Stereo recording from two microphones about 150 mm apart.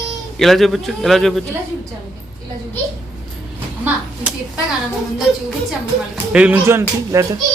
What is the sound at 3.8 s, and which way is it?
Speech, 10° right (ahead or behind).